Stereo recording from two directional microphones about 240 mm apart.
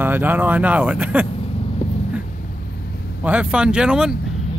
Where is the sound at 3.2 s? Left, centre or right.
Centre.